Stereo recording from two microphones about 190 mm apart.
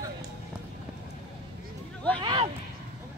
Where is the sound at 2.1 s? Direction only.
25° right (ahead or behind).